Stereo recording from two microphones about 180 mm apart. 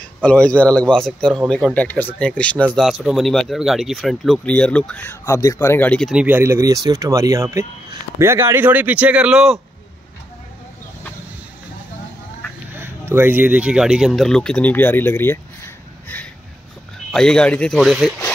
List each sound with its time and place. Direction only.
0.0 s speech: 5° left (ahead or behind)
5.2 s speech: 20° left (ahead or behind); by 9.6 s 5° right (ahead or behind)
13.1 s speech: 10° right (ahead or behind)